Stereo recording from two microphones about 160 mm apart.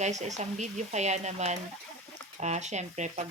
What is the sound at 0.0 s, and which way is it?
Speech, 45° right (ahead or behind).